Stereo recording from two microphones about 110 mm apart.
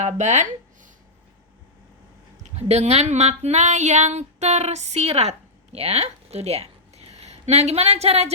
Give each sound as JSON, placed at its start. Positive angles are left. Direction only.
{"t": 0.0, "sound": "speech", "side_deg": -90}
{"t": 2.4, "sound": "speech", "side_deg": -75}